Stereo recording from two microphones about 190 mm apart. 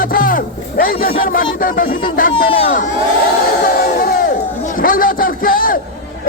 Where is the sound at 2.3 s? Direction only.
30° left (ahead or behind).